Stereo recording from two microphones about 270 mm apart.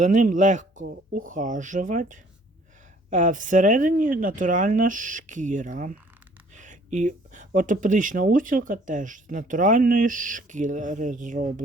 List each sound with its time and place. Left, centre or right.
0.0 s speech: right